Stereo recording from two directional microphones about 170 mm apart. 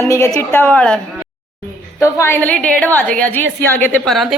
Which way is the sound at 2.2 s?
10° left (ahead or behind).